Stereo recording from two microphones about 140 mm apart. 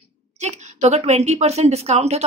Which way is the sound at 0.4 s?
55° right (ahead or behind).